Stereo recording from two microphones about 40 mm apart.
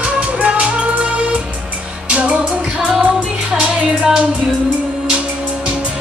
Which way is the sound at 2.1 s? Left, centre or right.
Right.